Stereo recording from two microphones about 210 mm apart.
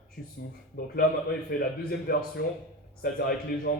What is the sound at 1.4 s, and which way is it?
A man's voice, 45° left (ahead or behind).